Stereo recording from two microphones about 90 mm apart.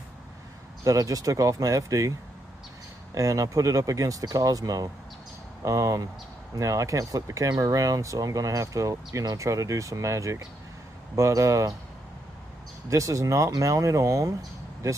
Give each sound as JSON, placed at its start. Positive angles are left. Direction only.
{"t": 0.8, "sound": "speech", "side_deg": -40}
{"t": 3.2, "sound": "speech", "side_deg": -40}
{"t": 12.9, "sound": "speech", "side_deg": -35}